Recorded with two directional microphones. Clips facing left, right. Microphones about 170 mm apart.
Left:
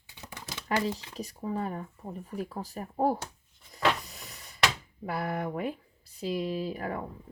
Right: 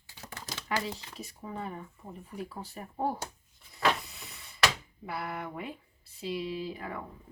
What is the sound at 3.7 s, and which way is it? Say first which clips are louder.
Power windows: left 1 dB; 40° left (ahead or behind).